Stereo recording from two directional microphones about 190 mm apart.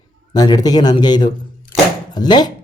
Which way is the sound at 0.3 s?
20° left (ahead or behind).